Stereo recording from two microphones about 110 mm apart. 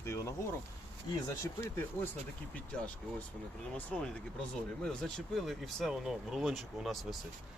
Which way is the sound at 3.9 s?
5° left (ahead or behind).